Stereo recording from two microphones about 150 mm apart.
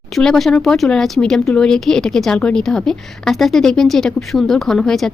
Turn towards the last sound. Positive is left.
turn(degrees=5)  # may be behind; listen again after turning